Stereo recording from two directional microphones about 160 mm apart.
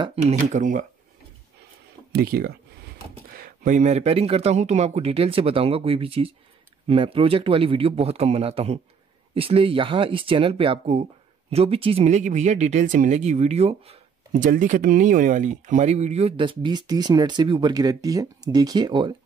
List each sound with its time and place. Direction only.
0.0 s speech: 40° right (ahead or behind)
2.1 s speech: 75° right (ahead or behind)
3.3 s speech: 60° right (ahead or behind); by 14.4 s 40° right (ahead or behind)
14.4 s speech: 55° right (ahead or behind); by 19.1 s 30° right (ahead or behind)